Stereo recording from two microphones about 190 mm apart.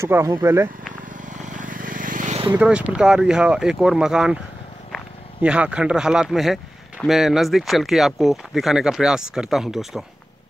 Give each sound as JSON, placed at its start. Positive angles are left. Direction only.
{"t": 0.0, "sound": "speech", "side_deg": -15}
{"t": 1.3, "sound": "vehicle", "side_deg": -40}
{"t": 2.6, "sound": "speech", "side_deg": -5}